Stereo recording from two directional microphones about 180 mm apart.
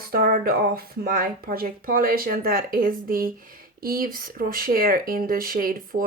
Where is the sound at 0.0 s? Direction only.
55° right (ahead or behind).